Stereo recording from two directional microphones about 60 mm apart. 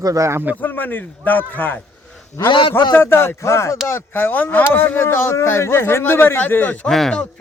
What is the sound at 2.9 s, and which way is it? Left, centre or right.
Speech, left.